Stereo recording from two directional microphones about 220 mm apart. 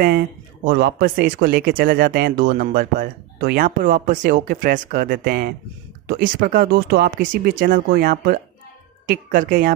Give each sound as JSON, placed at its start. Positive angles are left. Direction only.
{"t": 0.7, "sound": "speech", "side_deg": -45}